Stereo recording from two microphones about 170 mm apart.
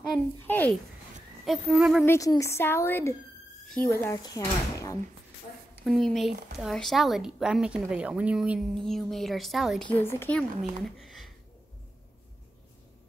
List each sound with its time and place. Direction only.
0.5 s speech: 10° left (ahead or behind)
1.4 s speech: 5° right (ahead or behind)
2.0 s speech: 20° left (ahead or behind)
5.9 s speech: centre (ahead or behind)
10.6 s speech: centre (ahead or behind)